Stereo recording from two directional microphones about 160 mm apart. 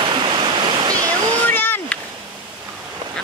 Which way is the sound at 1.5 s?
10° left (ahead or behind).